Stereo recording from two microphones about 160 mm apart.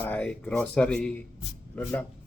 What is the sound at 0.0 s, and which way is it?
Speech, 10° left (ahead or behind).